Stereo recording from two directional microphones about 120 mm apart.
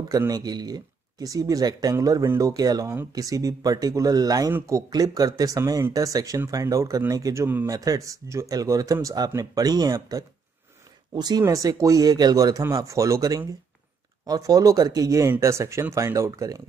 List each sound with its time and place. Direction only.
0.3 s speech: 35° right (ahead or behind)